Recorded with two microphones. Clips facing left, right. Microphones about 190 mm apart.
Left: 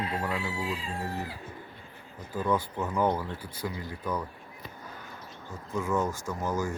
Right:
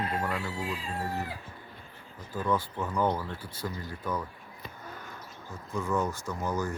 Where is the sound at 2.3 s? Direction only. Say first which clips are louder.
Left 1 dB; 15° left (ahead or behind).